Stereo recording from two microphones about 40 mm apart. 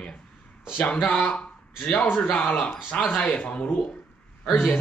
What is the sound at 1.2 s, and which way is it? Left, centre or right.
Speech, left.